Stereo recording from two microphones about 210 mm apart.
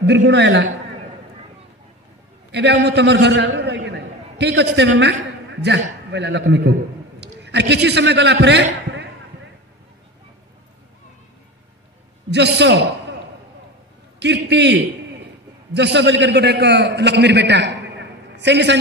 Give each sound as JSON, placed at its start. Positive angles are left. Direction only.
{"t": 0.0, "sound": "a man's voice", "side_deg": -55}
{"t": 2.5, "sound": "a man's voice", "side_deg": -55}
{"t": 12.3, "sound": "a man's voice", "side_deg": -55}
{"t": 14.2, "sound": "a man's voice", "side_deg": -55}